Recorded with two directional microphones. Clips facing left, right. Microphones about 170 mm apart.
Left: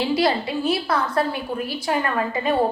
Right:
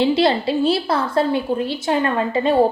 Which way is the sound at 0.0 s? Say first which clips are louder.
Right 4 dB; 25° right (ahead or behind).